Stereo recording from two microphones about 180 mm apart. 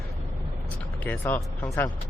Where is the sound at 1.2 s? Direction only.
15° left (ahead or behind).